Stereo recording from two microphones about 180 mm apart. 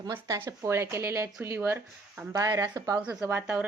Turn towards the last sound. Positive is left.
turn(degrees=-10)  # may be behind; listen again after turning